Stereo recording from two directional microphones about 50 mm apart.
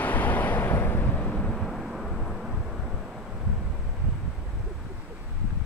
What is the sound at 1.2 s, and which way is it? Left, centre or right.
Vehicle, left.